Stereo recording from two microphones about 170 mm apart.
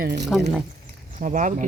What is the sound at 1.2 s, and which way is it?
Speech, 50° right (ahead or behind).